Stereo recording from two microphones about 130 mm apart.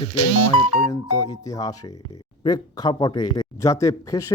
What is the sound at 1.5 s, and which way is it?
Speech, 30° left (ahead or behind).